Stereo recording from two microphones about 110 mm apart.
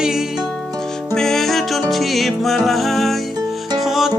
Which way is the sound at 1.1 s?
5° left (ahead or behind).